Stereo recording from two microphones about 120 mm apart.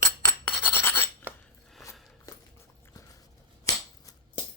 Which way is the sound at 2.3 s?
25° left (ahead or behind).